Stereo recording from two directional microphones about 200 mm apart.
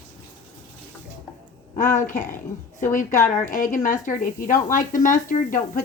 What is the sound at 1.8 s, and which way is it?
Speech, 40° left (ahead or behind).